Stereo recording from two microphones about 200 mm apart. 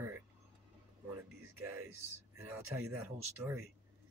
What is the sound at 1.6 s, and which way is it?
Speech, 90° right.